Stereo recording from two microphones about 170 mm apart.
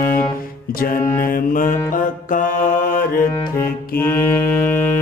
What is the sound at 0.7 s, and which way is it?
Mantra, 55° left (ahead or behind).